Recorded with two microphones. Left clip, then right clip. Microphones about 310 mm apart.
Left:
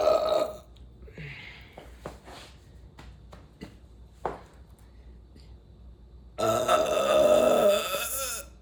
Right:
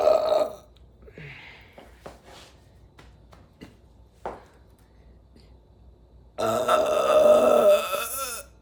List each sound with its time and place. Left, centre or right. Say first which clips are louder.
0.0 s burping: right 3 dB; centre
1.1 s a sound: even; centre
6.3 s grunt: right 2 dB; centre